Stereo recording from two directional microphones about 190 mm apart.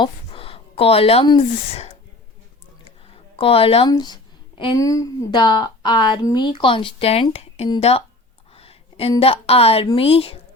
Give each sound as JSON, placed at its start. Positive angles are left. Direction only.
{"t": 0.0, "sound": "speech", "side_deg": 30}
{"t": 3.3, "sound": "a woman's voice", "side_deg": 30}